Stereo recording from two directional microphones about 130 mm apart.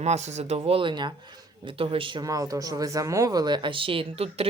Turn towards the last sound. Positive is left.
turn(degrees=-45)  # may be behind; listen again after turning